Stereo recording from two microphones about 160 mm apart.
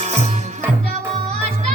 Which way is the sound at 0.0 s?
45° right (ahead or behind).